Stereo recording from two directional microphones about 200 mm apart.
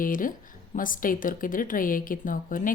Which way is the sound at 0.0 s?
45° left (ahead or behind).